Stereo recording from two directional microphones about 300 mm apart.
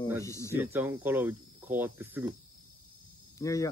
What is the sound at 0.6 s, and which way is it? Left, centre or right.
Speech, centre.